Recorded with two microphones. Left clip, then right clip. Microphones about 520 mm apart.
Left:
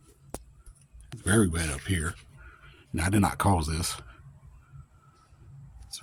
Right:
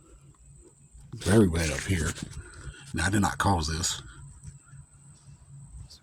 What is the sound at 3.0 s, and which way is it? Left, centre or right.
Speech, left.